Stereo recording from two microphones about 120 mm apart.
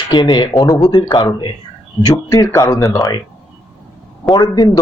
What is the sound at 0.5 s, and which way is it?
Speech, centre (ahead or behind).